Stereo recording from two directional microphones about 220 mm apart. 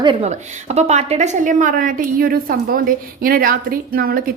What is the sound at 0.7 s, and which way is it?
A woman's voice, 30° right (ahead or behind).